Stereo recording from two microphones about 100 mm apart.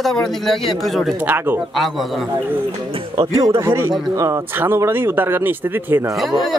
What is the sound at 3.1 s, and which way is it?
A man's voice, 40° right (ahead or behind).